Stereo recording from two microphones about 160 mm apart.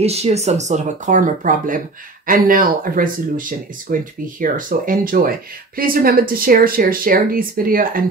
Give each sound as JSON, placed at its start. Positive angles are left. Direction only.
{"t": 0.0, "sound": "speech", "side_deg": -40}